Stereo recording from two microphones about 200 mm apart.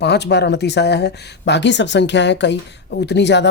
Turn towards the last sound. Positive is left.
turn(degrees=60)  # may be behind; listen again after turning